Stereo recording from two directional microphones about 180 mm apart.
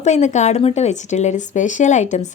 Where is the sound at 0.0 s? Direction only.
40° left (ahead or behind).